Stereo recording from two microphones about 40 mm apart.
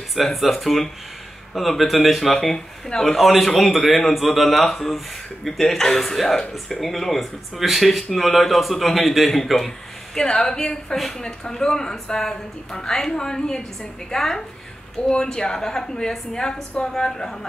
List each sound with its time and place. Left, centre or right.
0.1 s speech: centre
10.1 s a woman's voice: centre